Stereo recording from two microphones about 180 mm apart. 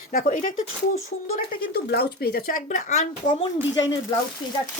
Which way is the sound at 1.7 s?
60° left (ahead or behind).